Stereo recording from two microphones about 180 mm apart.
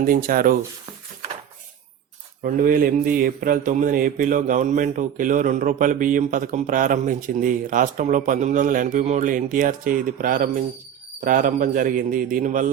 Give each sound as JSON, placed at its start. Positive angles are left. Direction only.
{"t": 0.0, "sound": "speech", "side_deg": -50}
{"t": 2.4, "sound": "speech", "side_deg": -50}